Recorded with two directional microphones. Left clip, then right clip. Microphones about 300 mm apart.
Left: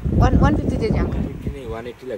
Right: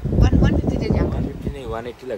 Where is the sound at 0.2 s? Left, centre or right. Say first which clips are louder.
Left 3 dB; centre.